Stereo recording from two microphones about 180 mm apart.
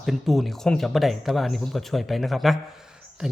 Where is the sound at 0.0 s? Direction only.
Centre (ahead or behind).